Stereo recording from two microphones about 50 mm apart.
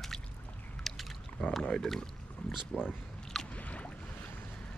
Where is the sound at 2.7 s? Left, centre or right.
Left.